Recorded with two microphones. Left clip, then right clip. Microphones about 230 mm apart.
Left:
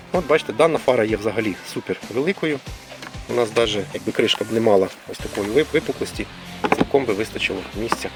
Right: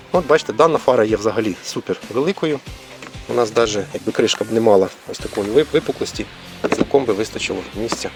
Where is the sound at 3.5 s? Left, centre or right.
Centre.